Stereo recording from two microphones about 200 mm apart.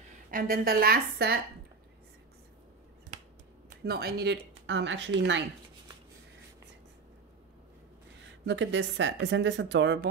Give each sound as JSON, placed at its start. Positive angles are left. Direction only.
{"t": 0.3, "sound": "a woman's voice", "side_deg": -45}
{"t": 3.8, "sound": "speech", "side_deg": -50}
{"t": 8.5, "sound": "speech", "side_deg": -60}